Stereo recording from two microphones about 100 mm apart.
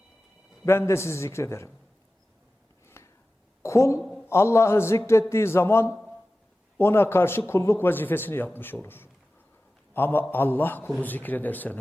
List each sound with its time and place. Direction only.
0.6 s a man's voice: 25° left (ahead or behind)
2.8 s a sound: 25° left (ahead or behind)
3.6 s a woman's voice: 30° left (ahead or behind)